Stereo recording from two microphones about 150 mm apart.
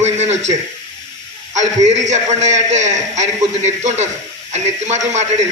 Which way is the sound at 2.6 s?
50° right (ahead or behind).